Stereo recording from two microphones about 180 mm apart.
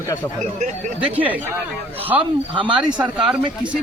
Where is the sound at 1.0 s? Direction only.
30° right (ahead or behind).